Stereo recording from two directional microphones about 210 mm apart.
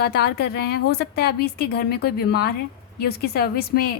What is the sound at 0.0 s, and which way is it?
A woman's voice, 50° left (ahead or behind).